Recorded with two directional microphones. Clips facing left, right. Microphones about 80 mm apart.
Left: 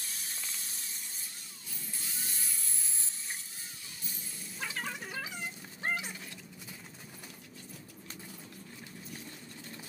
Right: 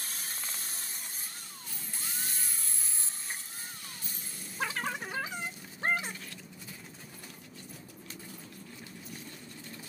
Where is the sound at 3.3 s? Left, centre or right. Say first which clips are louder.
Right 3 dB; right.